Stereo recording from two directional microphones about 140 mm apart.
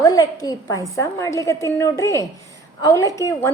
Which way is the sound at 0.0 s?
25° left (ahead or behind).